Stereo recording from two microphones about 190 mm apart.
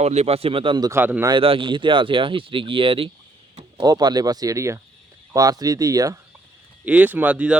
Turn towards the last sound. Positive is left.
turn(degrees=-5)  # may be behind; listen again after turning